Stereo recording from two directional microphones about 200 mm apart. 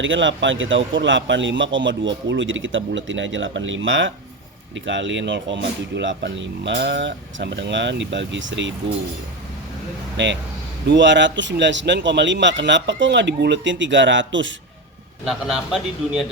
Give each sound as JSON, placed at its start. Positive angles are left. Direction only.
{"t": 0.0, "sound": "speech", "side_deg": -70}
{"t": 10.2, "sound": "speech", "side_deg": -65}
{"t": 15.2, "sound": "a man's voice", "side_deg": -5}